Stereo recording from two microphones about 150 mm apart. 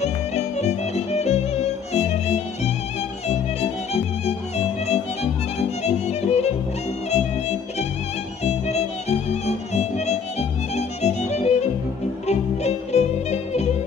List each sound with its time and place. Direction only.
0.0 s music: 45° left (ahead or behind)
1.2 s violin: 45° left (ahead or behind)
3.3 s music: 45° left (ahead or behind)
5.9 s violin: 45° left (ahead or behind)
7.1 s music: 45° left (ahead or behind)
8.5 s violin: 45° left (ahead or behind)
10.8 s music: 45° left (ahead or behind)